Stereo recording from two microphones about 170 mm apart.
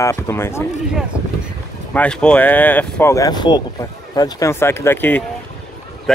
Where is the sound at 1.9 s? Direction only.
5° left (ahead or behind).